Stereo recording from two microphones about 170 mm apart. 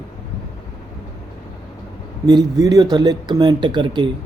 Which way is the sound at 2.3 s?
25° right (ahead or behind).